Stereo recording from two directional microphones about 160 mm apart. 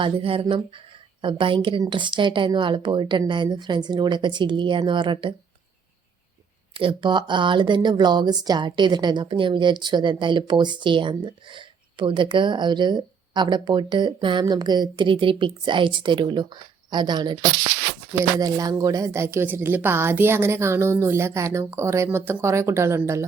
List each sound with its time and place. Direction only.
0.0 s speech: 35° right (ahead or behind)
6.7 s a woman's voice: 30° right (ahead or behind)